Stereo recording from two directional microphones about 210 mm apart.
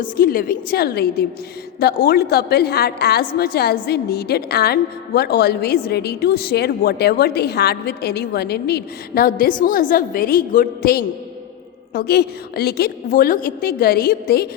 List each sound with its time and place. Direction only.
0.0 s a woman's voice: 45° left (ahead or behind)